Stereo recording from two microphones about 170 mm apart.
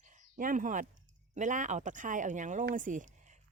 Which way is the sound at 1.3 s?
45° right (ahead or behind).